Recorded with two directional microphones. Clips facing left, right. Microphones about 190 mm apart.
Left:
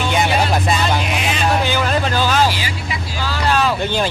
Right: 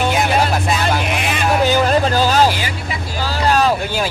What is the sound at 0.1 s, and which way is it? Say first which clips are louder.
Music: right 1 dB; centre (ahead or behind).